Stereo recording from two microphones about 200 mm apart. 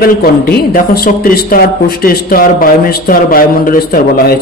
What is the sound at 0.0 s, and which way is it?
Speech, 45° left (ahead or behind).